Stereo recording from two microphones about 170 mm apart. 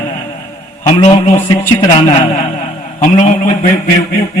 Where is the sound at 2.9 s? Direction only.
45° left (ahead or behind).